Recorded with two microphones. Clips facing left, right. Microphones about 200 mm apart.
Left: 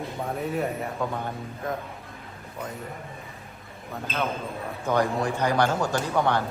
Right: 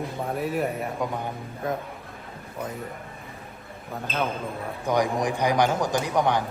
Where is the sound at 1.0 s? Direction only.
15° right (ahead or behind).